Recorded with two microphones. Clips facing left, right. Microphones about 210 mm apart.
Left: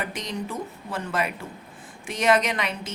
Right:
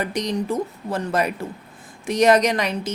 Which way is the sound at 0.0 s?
40° right (ahead or behind).